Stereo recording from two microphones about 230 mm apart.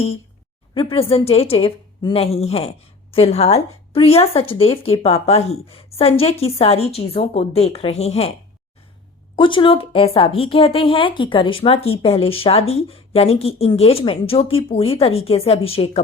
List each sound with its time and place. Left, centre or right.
0.7 s a woman's voice: left
9.3 s a woman's voice: left